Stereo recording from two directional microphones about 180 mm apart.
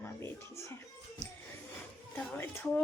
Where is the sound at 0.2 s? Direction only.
15° left (ahead or behind).